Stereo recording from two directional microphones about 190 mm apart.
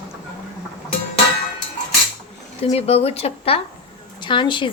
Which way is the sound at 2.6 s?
35° left (ahead or behind).